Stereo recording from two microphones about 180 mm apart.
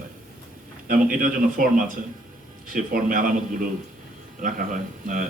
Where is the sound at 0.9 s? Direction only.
50° right (ahead or behind).